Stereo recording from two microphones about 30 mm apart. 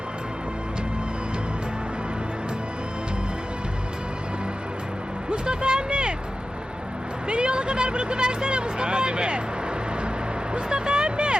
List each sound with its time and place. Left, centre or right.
5.3 s vehicle: right
7.3 s speech: right
10.5 s a sound: right